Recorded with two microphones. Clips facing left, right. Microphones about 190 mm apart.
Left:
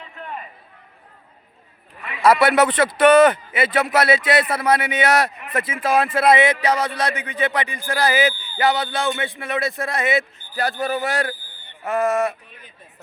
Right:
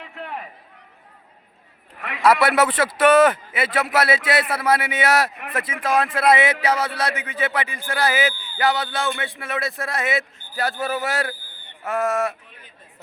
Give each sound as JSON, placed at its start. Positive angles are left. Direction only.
{"t": 0.0, "sound": "run", "side_deg": -70}
{"t": 2.2, "sound": "a man's voice", "side_deg": 0}